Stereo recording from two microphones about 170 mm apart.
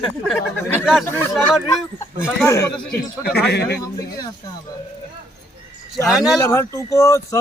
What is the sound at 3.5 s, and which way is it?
Speech, 75° left (ahead or behind).